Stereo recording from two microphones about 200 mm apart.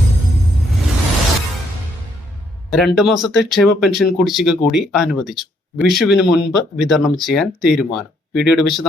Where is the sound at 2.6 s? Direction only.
Centre (ahead or behind).